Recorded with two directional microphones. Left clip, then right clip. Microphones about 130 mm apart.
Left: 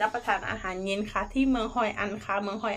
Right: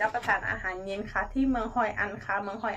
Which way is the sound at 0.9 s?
50° left (ahead or behind).